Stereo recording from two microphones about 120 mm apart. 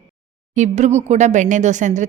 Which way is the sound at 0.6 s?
75° right (ahead or behind).